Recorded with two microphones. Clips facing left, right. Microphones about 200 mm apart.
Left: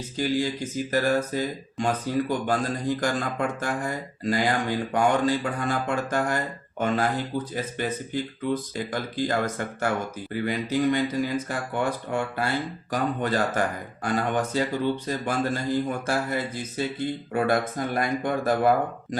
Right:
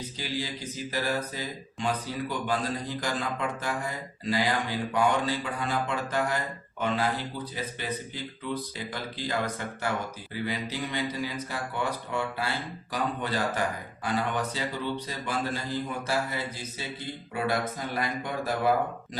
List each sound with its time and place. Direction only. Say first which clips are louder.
0.2 s a man's voice: left 10 dB; 50° left (ahead or behind)